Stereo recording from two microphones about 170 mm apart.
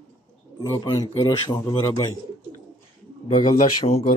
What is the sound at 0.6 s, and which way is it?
A man's voice, 20° left (ahead or behind).